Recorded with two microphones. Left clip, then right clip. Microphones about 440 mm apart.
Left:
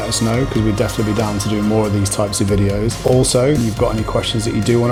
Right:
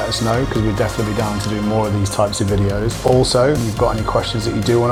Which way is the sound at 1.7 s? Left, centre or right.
Centre.